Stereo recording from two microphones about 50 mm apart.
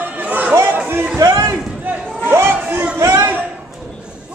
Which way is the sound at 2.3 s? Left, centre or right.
Right.